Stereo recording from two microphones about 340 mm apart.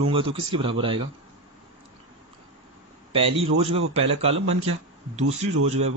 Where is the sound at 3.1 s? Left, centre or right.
Centre.